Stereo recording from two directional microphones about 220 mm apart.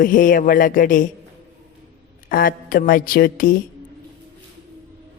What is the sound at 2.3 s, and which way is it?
Mantra, 40° left (ahead or behind).